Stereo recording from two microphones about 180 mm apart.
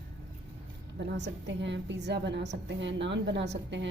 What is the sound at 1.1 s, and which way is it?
A woman's voice, 80° right.